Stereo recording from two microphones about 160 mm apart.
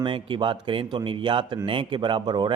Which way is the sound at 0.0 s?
30° right (ahead or behind).